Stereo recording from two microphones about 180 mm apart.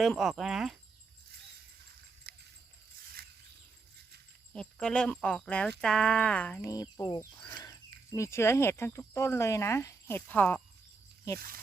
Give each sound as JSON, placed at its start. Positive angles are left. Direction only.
{"t": 0.0, "sound": "speech", "side_deg": 0}
{"t": 2.3, "sound": "a sound", "side_deg": -60}
{"t": 4.5, "sound": "speech", "side_deg": 5}
{"t": 6.9, "sound": "speech", "side_deg": 20}
{"t": 11.3, "sound": "speech", "side_deg": -55}